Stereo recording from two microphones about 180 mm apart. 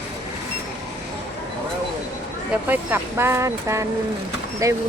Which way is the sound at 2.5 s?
10° right (ahead or behind).